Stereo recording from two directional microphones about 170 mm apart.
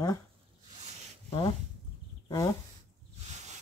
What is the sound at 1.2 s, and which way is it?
Speech, 30° left (ahead or behind).